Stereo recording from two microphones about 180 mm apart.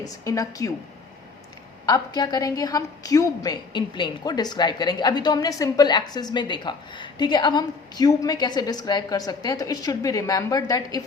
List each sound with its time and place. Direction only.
0.0 s a woman's voice: 20° left (ahead or behind)
1.9 s a woman's voice: 20° left (ahead or behind)